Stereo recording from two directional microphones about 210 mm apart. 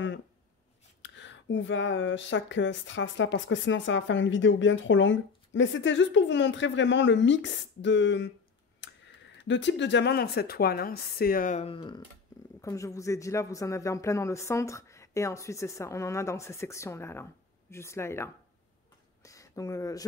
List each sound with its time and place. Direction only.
1.0 s speech: 60° left (ahead or behind)
8.8 s a sound: 60° left (ahead or behind)
9.4 s a woman's voice: 60° left (ahead or behind); by 20.1 s 15° left (ahead or behind)